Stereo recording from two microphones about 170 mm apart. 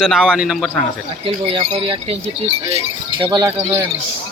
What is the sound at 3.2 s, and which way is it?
Speech, 20° right (ahead or behind).